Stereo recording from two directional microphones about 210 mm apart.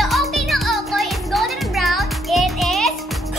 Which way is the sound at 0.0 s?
Centre (ahead or behind).